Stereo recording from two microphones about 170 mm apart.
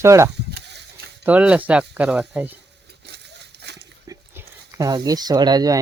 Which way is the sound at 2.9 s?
75° right (ahead or behind).